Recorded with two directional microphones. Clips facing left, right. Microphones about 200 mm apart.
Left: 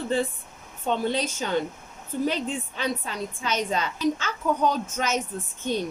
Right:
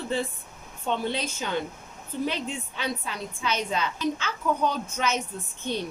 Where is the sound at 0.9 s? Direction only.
45° left (ahead or behind).